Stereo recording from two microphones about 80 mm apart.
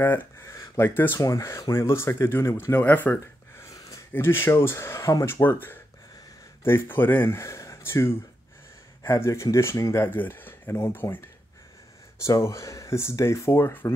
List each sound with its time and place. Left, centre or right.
0.0 s speech: left
0.4 s speech: left
1.2 s speech: left
2.8 s speech: left
3.5 s a sound: left
4.1 s speech: left
5.2 s speech: left
7.3 s speech: left
10.1 s speech: left
12.2 s speech: left